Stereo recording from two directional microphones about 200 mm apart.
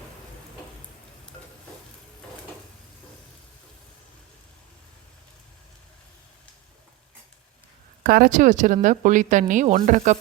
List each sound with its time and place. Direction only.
8.0 s speech: 45° right (ahead or behind)